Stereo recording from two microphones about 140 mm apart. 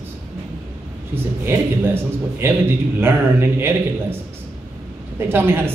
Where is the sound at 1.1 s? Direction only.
15° right (ahead or behind).